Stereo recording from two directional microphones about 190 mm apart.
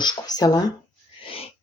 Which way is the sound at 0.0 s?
20° left (ahead or behind).